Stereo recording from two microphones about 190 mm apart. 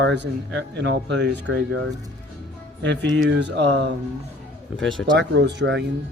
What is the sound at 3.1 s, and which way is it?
Speech, 70° right (ahead or behind).